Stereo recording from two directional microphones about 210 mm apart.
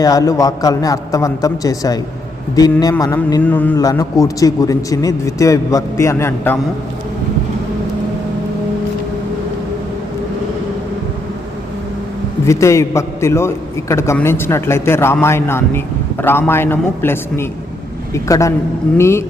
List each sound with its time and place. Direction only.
0.0 s a man's voice: 15° left (ahead or behind)
12.5 s a man's voice: 15° left (ahead or behind)